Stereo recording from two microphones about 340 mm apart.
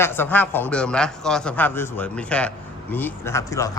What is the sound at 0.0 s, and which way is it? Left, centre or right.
A man's voice, centre.